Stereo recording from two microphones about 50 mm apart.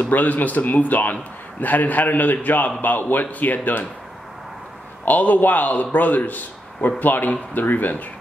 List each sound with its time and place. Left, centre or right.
0.0 s a man's voice: left
5.0 s a man's voice: left